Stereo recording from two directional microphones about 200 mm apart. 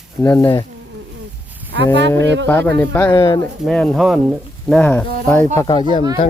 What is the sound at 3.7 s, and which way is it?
Speech, centre (ahead or behind).